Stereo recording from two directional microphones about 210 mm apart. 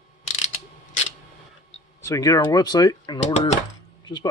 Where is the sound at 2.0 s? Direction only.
15° left (ahead or behind).